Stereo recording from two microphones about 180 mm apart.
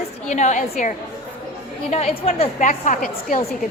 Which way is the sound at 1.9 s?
35° left (ahead or behind).